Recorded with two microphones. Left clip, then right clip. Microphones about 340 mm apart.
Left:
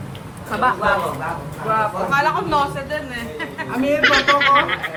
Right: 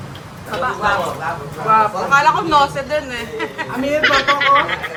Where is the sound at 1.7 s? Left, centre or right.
Right.